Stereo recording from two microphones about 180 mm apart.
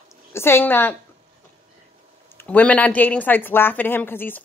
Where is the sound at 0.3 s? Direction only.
15° left (ahead or behind).